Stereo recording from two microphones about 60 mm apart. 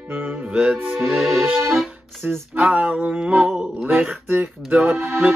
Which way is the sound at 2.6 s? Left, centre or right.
Right.